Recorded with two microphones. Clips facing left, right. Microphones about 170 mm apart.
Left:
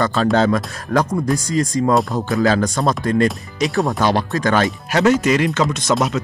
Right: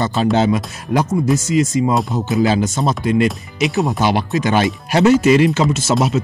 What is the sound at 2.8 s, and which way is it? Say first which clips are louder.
Speech: right 1 dB; 5° right (ahead or behind).